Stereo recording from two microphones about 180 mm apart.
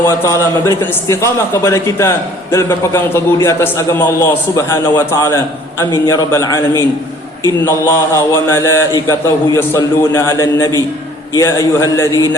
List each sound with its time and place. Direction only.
0.8 s a man's voice: 15° left (ahead or behind)